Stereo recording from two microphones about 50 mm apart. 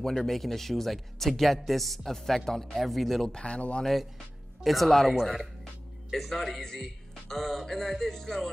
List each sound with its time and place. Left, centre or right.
0.0 s a man's voice: centre
3.3 s speech: centre
3.8 s a man's voice: centre